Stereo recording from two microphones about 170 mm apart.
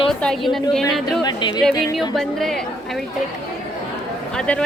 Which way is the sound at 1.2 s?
25° left (ahead or behind).